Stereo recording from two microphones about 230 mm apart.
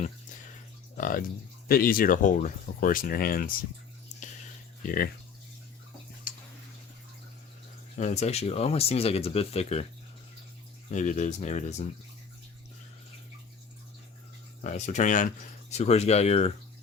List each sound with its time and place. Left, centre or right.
0.9 s speech: left
4.8 s speech: left
7.9 s speech: left
10.9 s speech: left
14.6 s speech: left